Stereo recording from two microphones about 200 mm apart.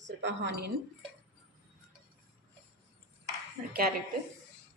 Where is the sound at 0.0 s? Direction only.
65° right (ahead or behind).